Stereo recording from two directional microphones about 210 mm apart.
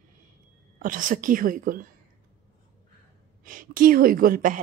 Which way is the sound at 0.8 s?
40° right (ahead or behind).